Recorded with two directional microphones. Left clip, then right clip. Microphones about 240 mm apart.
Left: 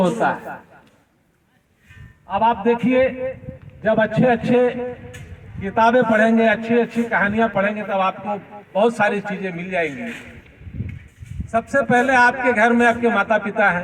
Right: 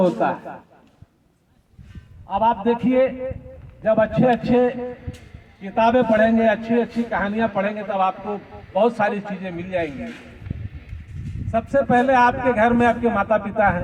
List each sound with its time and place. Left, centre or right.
0.0 s a man's voice: left
2.3 s a man's voice: left
11.5 s a man's voice: left